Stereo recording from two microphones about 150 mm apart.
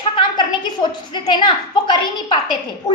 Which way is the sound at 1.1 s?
30° left (ahead or behind).